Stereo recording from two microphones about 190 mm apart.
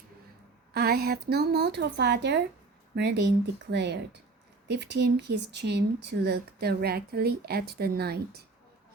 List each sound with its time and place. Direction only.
0.7 s speech: 55° right (ahead or behind)